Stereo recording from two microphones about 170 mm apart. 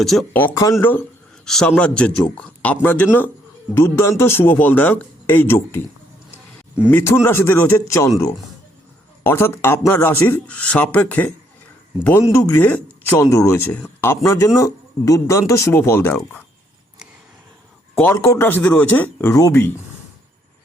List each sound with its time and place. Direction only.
0.0 s speech: centre (ahead or behind)
0.3 s a man's voice: 15° left (ahead or behind)
6.9 s a man's voice: 15° left (ahead or behind)
9.2 s a man's voice: 15° left (ahead or behind)
12.3 s a man's voice: 15° left (ahead or behind)
17.9 s a man's voice: 15° left (ahead or behind)